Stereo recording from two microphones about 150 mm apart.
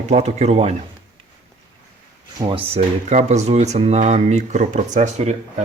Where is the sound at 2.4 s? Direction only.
35° right (ahead or behind).